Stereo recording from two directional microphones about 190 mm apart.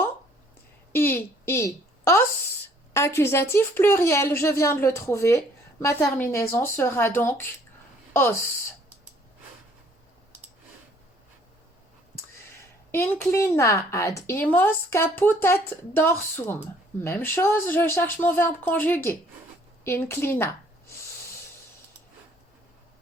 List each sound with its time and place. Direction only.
0.9 s a sound: 15° left (ahead or behind)
2.9 s a woman's voice: 15° left (ahead or behind)
12.9 s a woman's voice: 10° left (ahead or behind)